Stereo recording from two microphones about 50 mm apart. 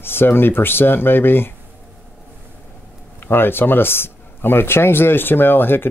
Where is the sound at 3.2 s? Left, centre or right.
Left.